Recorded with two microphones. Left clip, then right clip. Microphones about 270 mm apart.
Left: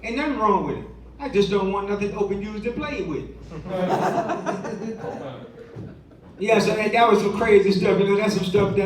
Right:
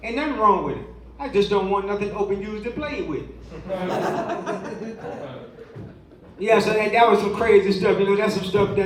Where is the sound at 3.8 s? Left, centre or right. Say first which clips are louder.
Left 3 dB; centre.